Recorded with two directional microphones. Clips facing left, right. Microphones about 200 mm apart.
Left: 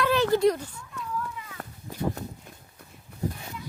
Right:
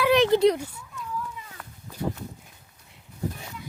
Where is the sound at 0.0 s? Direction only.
20° right (ahead or behind).